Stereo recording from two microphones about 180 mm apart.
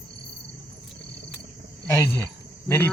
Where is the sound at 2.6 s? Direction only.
15° left (ahead or behind).